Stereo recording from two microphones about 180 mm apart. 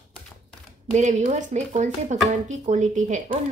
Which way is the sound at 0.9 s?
40° right (ahead or behind).